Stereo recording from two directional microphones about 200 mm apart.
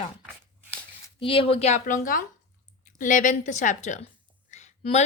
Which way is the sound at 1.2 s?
25° left (ahead or behind).